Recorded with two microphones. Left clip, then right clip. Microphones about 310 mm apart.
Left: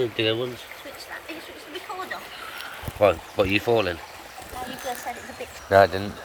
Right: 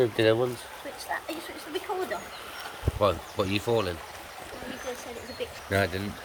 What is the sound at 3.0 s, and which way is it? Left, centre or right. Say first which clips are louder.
Speech: left 6 dB; centre.